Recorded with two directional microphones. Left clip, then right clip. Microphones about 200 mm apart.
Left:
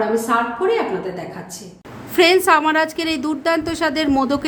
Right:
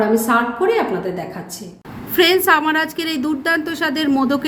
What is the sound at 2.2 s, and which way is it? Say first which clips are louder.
A woman's voice: even; 10° left (ahead or behind).